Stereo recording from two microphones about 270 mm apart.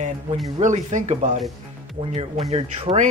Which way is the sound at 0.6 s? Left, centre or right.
Right.